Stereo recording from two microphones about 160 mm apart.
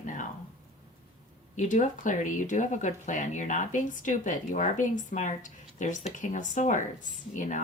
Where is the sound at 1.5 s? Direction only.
50° left (ahead or behind).